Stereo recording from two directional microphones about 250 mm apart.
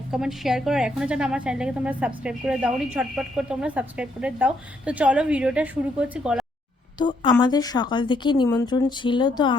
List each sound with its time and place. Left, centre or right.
0.1 s a woman's voice: centre
7.0 s a woman's voice: centre